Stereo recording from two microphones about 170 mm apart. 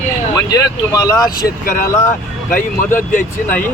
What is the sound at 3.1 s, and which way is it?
Speech, 50° left (ahead or behind).